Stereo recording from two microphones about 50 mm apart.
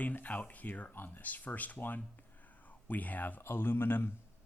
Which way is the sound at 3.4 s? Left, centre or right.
Left.